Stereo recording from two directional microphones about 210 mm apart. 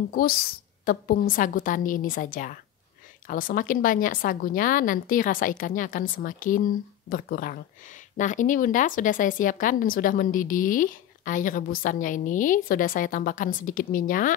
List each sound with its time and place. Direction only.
0.1 s a woman's voice: 45° left (ahead or behind)